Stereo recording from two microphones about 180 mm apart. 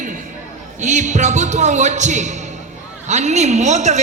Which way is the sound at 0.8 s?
40° right (ahead or behind).